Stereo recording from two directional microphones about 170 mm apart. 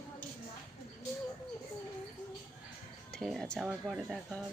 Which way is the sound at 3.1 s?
Centre (ahead or behind).